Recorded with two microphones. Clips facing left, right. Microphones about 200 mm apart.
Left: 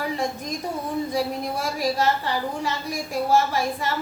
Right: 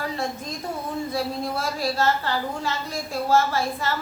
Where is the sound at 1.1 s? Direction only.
15° left (ahead or behind).